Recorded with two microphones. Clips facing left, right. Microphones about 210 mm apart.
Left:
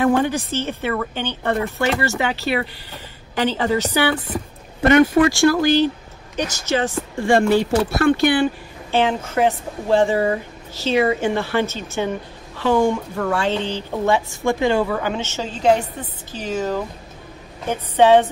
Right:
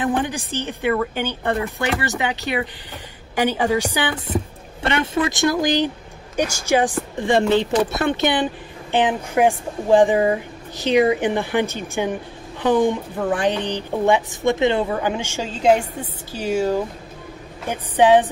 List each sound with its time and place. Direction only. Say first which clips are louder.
0.0 s a woman's voice: left 4 dB; 15° right (ahead or behind)
4.9 s a woman's voice: left 8 dB; 25° right (ahead or behind)